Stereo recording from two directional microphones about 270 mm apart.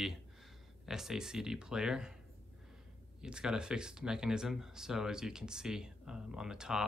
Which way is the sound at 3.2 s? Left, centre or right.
Centre.